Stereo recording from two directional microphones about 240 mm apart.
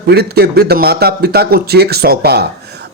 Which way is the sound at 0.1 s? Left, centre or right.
Right.